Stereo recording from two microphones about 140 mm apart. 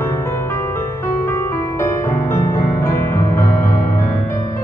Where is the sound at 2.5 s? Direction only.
20° left (ahead or behind).